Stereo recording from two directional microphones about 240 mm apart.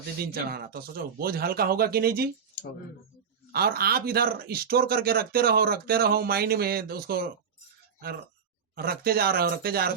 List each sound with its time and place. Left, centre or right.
0.3 s speech: right
3.5 s speech: right
8.7 s speech: right